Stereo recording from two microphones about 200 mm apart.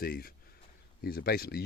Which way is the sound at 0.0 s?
45° left (ahead or behind).